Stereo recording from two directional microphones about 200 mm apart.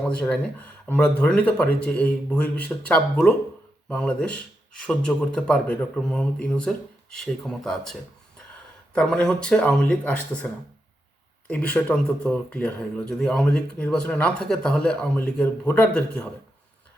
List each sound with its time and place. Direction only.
0.0 s speech: 5° left (ahead or behind)